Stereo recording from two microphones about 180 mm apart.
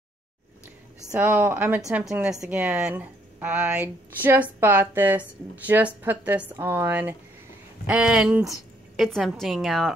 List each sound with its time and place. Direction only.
1.1 s a woman's voice: 10° right (ahead or behind)